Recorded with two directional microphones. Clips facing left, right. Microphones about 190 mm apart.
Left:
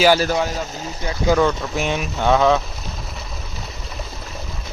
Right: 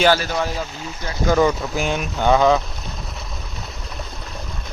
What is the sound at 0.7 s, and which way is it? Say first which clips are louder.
Speech: left 2 dB; 40° left (ahead or behind).